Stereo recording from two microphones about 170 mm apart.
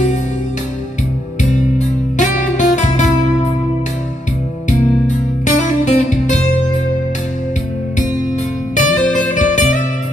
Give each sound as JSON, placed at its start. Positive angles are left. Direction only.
{"t": 2.1, "sound": "music", "side_deg": 45}
{"t": 5.0, "sound": "music", "side_deg": 45}
{"t": 8.7, "sound": "music", "side_deg": 45}